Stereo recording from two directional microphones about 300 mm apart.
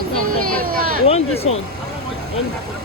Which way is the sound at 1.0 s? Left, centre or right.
Centre.